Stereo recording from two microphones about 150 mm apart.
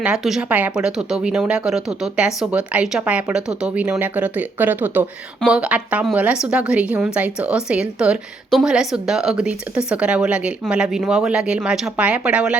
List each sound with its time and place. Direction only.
0.0 s a woman's voice: 5° right (ahead or behind)